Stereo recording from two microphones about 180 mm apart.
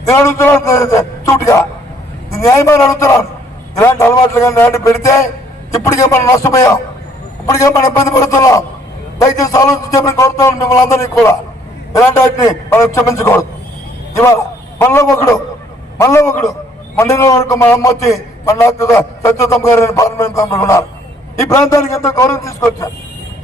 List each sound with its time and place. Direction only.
0.1 s a man's voice: 15° left (ahead or behind)